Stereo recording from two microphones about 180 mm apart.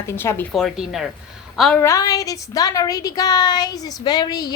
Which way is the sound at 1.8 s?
15° left (ahead or behind).